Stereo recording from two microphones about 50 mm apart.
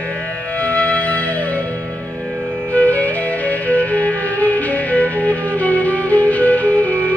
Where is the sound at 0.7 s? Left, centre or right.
Left.